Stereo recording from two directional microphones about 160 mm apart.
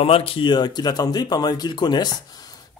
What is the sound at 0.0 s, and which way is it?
Speech, 35° left (ahead or behind).